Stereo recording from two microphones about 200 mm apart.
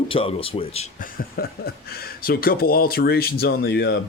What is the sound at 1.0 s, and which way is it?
Speech, 45° left (ahead or behind).